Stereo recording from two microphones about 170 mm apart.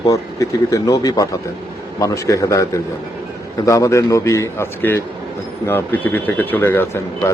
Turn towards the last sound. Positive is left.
turn(degrees=15)  # may be behind; listen again after turning